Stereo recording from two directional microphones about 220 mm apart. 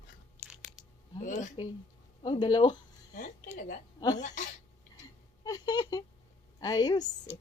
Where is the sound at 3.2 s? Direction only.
35° left (ahead or behind).